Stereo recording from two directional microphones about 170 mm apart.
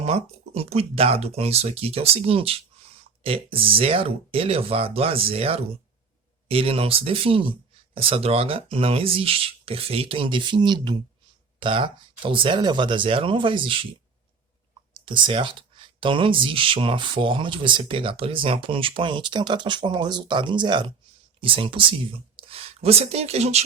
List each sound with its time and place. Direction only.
0.0 s speech: 35° right (ahead or behind)
14.9 s speech: 30° right (ahead or behind)